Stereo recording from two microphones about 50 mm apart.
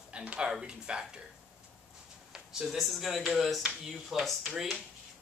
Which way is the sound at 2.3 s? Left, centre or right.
Centre.